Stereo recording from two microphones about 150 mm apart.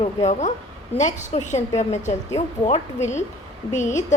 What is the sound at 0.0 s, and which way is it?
Speech, 50° left (ahead or behind).